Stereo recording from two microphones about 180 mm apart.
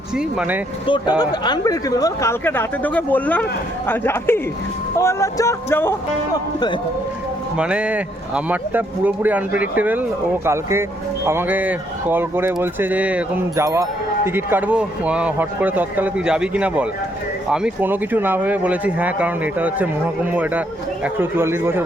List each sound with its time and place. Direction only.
0.2 s a man's voice: 5° right (ahead or behind)
0.9 s speech: 25° left (ahead or behind)
7.5 s a man's voice: 5° right (ahead or behind)